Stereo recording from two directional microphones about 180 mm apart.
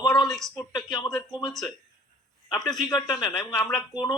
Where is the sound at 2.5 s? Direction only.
Centre (ahead or behind).